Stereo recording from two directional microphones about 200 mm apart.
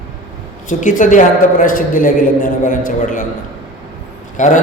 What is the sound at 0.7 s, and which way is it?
A man's voice, 40° left (ahead or behind).